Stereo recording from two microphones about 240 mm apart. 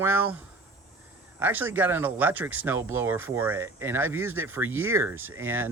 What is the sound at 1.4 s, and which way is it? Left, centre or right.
Speech, centre.